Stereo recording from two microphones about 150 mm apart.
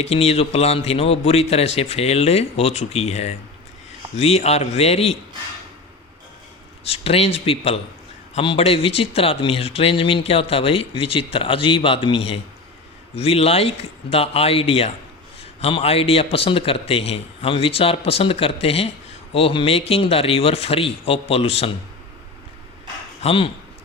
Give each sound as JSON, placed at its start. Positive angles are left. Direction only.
{"t": 0.0, "sound": "speech", "side_deg": 45}
{"t": 6.8, "sound": "speech", "side_deg": 40}
{"t": 23.2, "sound": "speech", "side_deg": 35}